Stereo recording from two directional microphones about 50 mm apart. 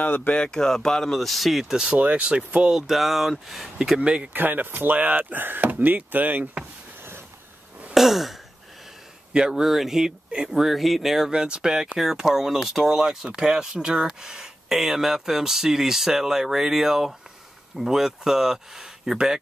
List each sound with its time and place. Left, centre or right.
0.0 s speech: left
0.3 s speech: centre
2.0 s speech: right
2.7 s speech: centre
4.0 s speech: right
4.3 s speech: right
7.0 s vehicle: right
7.9 s speech: centre
9.3 s speech: centre
10.5 s speech: centre